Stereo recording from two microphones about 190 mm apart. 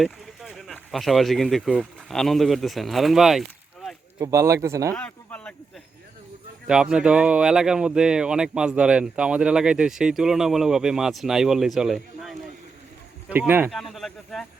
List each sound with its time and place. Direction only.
0.0 s speech: centre (ahead or behind)
4.2 s speech: 15° right (ahead or behind)
4.9 s a sound: 5° left (ahead or behind)
6.7 s speech: 5° right (ahead or behind)